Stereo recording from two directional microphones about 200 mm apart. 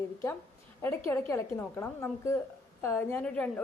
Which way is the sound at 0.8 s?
10° left (ahead or behind).